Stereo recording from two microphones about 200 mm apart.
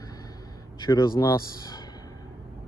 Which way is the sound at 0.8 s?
20° left (ahead or behind).